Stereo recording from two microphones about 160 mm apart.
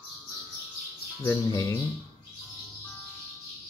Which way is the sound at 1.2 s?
20° left (ahead or behind).